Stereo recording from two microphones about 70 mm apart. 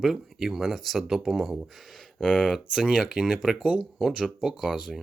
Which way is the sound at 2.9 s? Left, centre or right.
Centre.